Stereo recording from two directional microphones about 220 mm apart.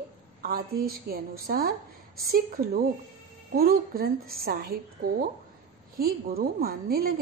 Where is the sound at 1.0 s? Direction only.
45° right (ahead or behind).